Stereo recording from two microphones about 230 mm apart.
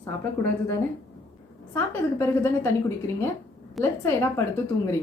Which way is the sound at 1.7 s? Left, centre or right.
Centre.